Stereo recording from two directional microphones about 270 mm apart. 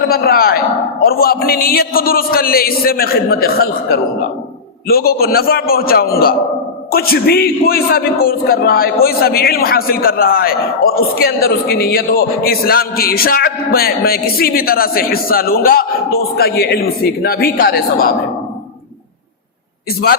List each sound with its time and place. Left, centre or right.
0.1 s a man's voice: left